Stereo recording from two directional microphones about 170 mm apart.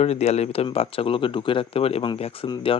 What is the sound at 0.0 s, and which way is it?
Speech, 40° left (ahead or behind).